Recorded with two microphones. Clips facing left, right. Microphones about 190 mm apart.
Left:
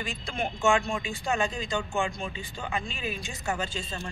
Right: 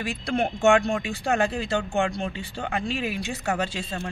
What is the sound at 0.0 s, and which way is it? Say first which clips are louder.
Speech: right 7 dB; 65° right (ahead or behind).